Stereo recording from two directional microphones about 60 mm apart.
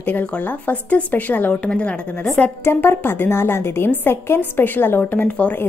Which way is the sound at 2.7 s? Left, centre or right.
Left.